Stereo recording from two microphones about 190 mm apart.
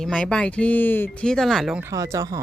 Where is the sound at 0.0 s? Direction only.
5° left (ahead or behind).